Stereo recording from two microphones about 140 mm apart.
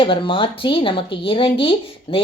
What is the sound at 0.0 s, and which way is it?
Speech, 40° left (ahead or behind).